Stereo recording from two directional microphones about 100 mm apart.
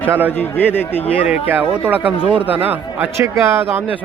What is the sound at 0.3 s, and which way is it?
Speech, 20° left (ahead or behind).